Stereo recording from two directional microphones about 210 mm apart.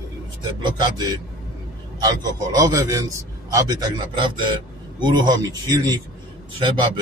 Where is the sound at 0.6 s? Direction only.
20° right (ahead or behind).